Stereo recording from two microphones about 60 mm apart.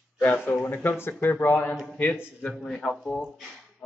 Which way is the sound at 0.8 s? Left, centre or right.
Left.